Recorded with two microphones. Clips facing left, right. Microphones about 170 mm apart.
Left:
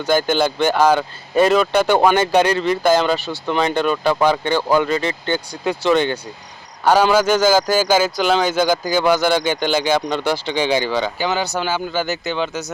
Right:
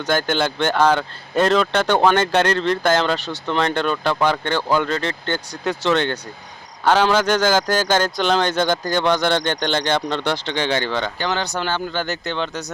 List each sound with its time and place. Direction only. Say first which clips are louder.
0.0 s speech: left 3 dB; 10° left (ahead or behind)